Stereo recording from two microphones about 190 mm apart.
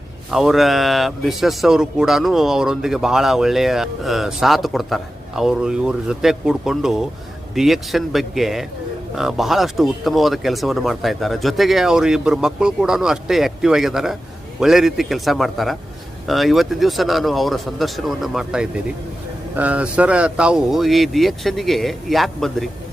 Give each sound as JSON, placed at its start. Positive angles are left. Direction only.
{"t": 0.3, "sound": "speech", "side_deg": 0}